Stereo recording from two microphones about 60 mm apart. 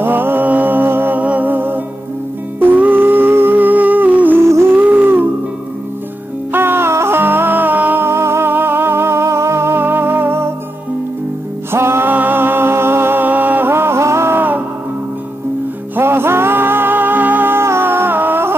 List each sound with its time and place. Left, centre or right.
0.0 s music: right
4.4 s music: right
4.7 s a sound: right
6.5 s music: right
11.7 s music: right
12.1 s music: right
16.0 s music: right